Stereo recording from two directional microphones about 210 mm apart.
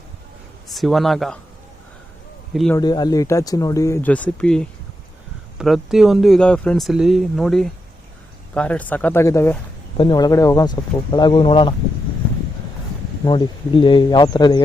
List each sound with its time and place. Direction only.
0.7 s speech: centre (ahead or behind)
2.5 s speech: centre (ahead or behind)
2.7 s speech: 20° left (ahead or behind)
13.2 s speech: 20° left (ahead or behind)